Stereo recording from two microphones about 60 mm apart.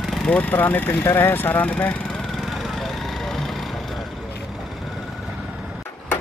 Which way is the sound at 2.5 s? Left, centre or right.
Centre.